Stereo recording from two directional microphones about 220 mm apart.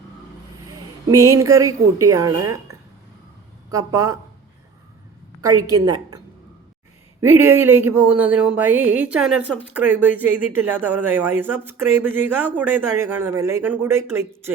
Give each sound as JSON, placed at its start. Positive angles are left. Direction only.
{"t": 1.3, "sound": "speech", "side_deg": -15}
{"t": 5.5, "sound": "speech", "side_deg": -15}